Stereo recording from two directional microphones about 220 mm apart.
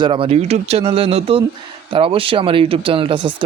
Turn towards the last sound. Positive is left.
turn(degrees=-25)  # may be behind; listen again after turning